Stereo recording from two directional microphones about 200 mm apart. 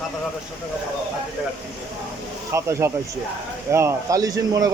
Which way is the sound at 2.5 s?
15° right (ahead or behind).